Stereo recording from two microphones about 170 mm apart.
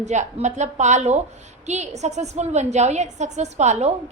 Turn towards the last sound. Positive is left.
turn(degrees=-40)  # may be behind; listen again after turning